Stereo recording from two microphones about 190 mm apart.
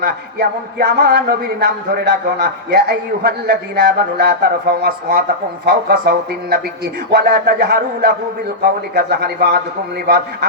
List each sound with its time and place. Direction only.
0.0 s a man's voice: 55° right (ahead or behind)